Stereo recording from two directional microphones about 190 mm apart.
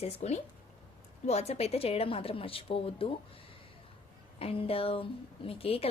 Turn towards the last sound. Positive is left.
turn(degrees=30)  # may be behind; listen again after turning